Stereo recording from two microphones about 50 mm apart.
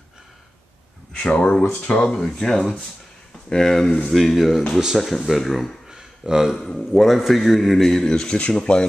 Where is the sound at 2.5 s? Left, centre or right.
Centre.